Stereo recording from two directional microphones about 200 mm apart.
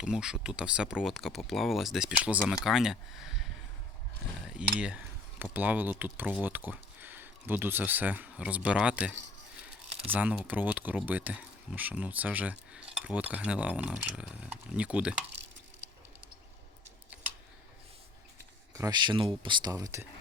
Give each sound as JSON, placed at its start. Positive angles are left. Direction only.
{"t": 0.0, "sound": "speech", "side_deg": -5}
{"t": 4.5, "sound": "speech", "side_deg": -5}
{"t": 18.7, "sound": "speech", "side_deg": -20}